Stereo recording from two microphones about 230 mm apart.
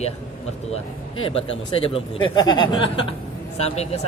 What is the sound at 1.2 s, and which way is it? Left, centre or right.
Speech, left.